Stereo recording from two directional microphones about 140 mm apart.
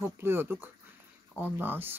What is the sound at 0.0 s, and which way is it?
Speech, 15° right (ahead or behind).